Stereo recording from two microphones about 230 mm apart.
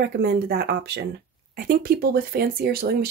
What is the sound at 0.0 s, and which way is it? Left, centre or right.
Speech, right.